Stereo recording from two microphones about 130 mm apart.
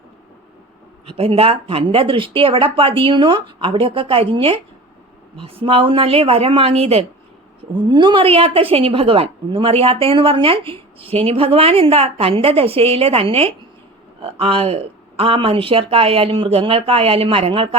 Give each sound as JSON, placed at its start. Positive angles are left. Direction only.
{"t": 1.0, "sound": "a woman's voice", "side_deg": -45}
{"t": 7.7, "sound": "a woman's voice", "side_deg": -35}